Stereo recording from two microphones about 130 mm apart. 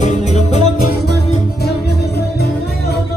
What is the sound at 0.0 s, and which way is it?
Music, 65° left (ahead or behind).